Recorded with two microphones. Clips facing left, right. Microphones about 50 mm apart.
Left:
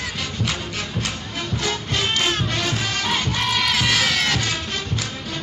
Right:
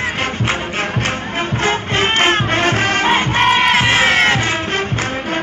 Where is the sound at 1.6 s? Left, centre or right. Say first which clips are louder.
Right 8 dB; right.